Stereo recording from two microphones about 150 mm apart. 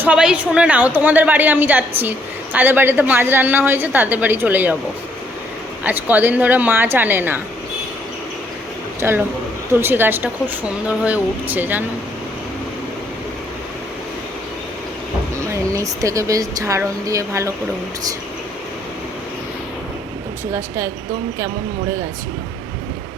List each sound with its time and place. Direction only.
0.0 s a woman's voice: 5° right (ahead or behind)
5.8 s a woman's voice: 10° right (ahead or behind)
9.0 s a man's voice: 15° right (ahead or behind)
15.4 s speech: 20° right (ahead or behind)
20.5 s a woman's voice: 20° right (ahead or behind)